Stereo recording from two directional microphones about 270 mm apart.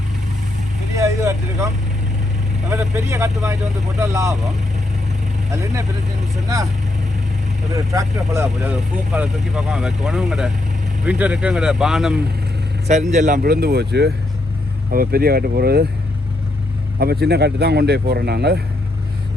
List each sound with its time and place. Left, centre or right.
0.9 s vehicle: centre
2.6 s speech: centre
5.5 s speech: centre
7.7 s speech: centre
12.9 s speech: right
17.0 s speech: right